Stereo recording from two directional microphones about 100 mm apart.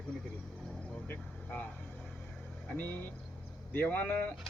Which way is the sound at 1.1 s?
15° left (ahead or behind).